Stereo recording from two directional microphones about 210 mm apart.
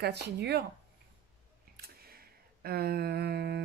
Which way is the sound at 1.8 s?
45° right (ahead or behind).